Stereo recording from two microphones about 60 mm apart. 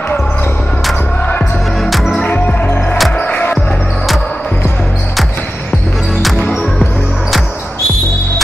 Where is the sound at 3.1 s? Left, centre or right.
Left.